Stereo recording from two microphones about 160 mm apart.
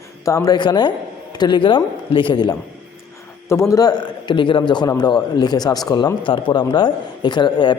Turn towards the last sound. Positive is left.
turn(degrees=30)  # may be behind; listen again after turning